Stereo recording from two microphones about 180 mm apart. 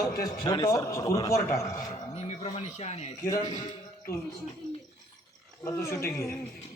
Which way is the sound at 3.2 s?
20° left (ahead or behind).